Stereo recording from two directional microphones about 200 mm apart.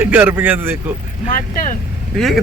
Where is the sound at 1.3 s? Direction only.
40° left (ahead or behind).